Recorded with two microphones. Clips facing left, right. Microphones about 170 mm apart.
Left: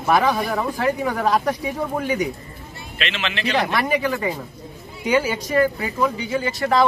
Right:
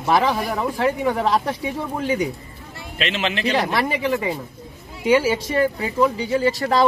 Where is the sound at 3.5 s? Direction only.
25° right (ahead or behind).